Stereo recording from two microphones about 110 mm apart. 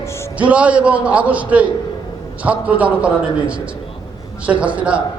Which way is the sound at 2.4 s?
10° right (ahead or behind).